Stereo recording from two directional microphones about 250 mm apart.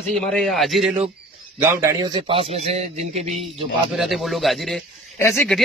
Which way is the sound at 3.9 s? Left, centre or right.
Centre.